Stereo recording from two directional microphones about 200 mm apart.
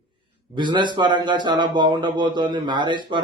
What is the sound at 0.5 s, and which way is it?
Speech, 20° right (ahead or behind).